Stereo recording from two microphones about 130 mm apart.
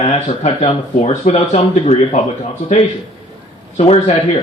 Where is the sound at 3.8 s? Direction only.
50° left (ahead or behind).